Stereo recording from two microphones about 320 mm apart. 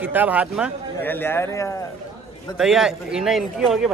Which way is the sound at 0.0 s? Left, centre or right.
Centre.